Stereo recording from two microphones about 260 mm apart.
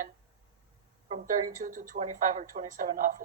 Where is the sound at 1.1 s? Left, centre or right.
Right.